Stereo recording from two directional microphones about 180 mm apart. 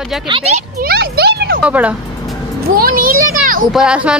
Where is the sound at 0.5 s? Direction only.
55° right (ahead or behind).